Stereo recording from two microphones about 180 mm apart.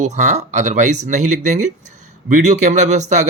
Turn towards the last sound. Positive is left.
turn(degrees=-40)  # may be behind; listen again after turning